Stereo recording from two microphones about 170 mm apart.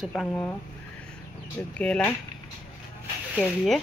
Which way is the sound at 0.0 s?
Centre (ahead or behind).